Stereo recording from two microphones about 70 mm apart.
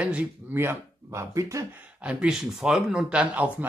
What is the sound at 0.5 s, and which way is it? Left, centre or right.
Speech, right.